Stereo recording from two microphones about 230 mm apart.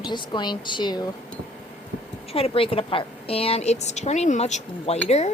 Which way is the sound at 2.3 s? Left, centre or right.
Left.